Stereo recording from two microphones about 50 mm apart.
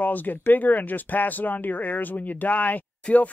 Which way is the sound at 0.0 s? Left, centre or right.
Left.